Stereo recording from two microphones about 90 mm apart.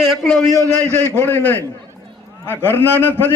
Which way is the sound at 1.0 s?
20° left (ahead or behind).